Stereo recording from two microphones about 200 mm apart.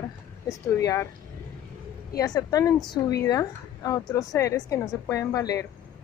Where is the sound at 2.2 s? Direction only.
15° left (ahead or behind).